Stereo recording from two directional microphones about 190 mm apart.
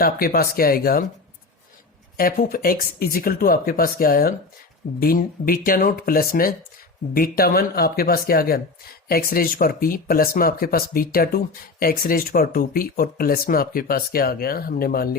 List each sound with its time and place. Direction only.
0.0 s speech: 55° left (ahead or behind)
2.1 s speech: 50° left (ahead or behind)